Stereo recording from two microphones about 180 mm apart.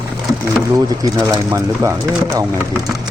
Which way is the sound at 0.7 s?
20° right (ahead or behind).